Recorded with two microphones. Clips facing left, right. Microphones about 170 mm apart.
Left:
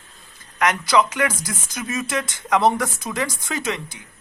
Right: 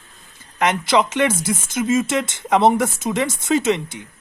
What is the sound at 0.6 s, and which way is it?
Speech, 25° right (ahead or behind).